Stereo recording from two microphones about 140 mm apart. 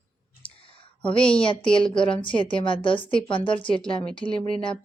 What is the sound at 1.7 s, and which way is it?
A woman's voice, 35° left (ahead or behind).